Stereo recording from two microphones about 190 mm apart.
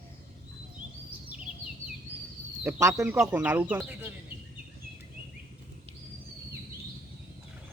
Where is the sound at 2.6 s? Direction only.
15° right (ahead or behind).